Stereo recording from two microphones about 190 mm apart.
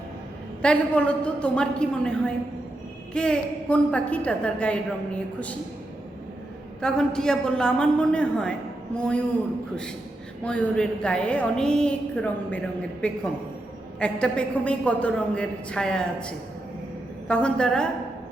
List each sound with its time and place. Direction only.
0.6 s a woman's voice: 5° left (ahead or behind)
6.8 s a woman's voice: 5° left (ahead or behind)
10.4 s a woman's voice: 5° left (ahead or behind)